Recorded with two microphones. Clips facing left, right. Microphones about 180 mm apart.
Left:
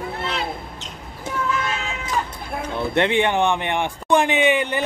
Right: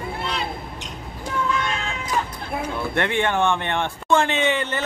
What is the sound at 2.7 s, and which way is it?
A man's voice, 20° left (ahead or behind).